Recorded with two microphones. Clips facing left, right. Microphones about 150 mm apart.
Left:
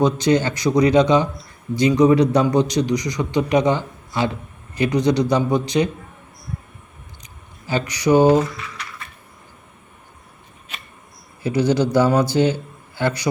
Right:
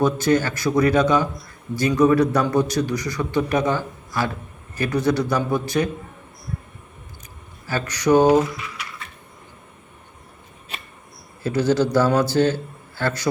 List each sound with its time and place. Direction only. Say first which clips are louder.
0.0 s a man's voice: left 2 dB; 20° left (ahead or behind)
7.7 s a man's voice: left 1 dB; 15° left (ahead or behind)
8.3 s a sound: left 1 dB; 5° right (ahead or behind)
11.4 s a man's voice: left 1 dB; 15° left (ahead or behind)